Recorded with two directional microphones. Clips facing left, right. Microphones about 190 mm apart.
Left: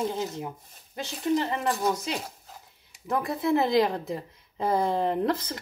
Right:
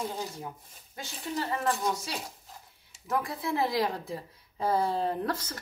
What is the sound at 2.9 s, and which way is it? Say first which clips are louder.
Speech: left 3 dB; 20° left (ahead or behind).